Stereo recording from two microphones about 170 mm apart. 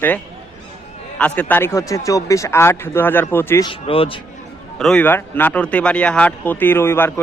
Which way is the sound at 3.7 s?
35° left (ahead or behind).